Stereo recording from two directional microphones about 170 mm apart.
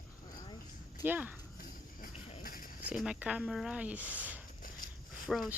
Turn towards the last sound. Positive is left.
turn(degrees=5)  # may be behind; listen again after turning